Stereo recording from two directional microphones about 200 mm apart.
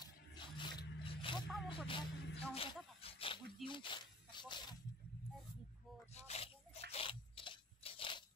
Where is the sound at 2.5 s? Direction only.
30° left (ahead or behind).